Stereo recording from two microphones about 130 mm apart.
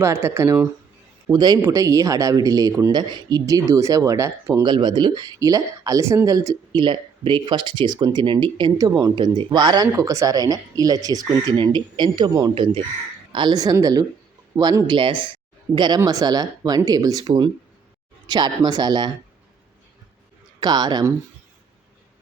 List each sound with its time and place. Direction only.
0.0 s speech: 20° right (ahead or behind)
1.3 s speech: 35° right (ahead or behind)
4.6 s speech: 35° right (ahead or behind)
9.1 s speech: 40° right (ahead or behind)
9.8 s speech: 25° right (ahead or behind)
20.6 s speech: 30° right (ahead or behind)